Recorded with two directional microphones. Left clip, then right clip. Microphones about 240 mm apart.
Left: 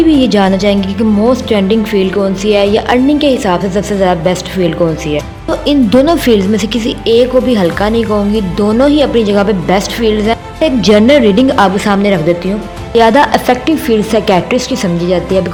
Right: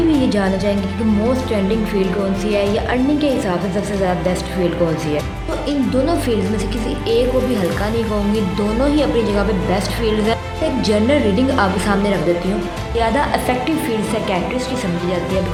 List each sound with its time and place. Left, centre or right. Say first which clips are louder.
0.2 s a woman's voice: left 8 dB; left